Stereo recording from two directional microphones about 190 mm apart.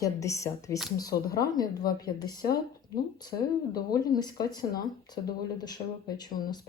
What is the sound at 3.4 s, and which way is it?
Speech, 55° left (ahead or behind).